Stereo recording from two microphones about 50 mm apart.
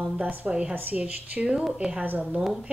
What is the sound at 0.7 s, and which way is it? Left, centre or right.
Speech, right.